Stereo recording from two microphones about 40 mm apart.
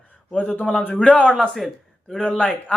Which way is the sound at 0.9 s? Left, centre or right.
Left.